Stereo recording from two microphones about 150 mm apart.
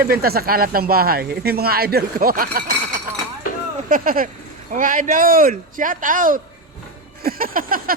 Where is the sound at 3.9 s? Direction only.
70° right (ahead or behind).